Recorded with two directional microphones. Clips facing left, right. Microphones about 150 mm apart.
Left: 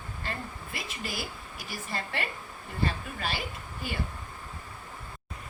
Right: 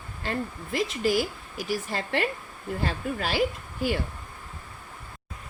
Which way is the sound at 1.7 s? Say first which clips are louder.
Right 7 dB; 85° right.